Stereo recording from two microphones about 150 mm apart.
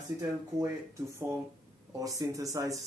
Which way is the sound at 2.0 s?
25° right (ahead or behind).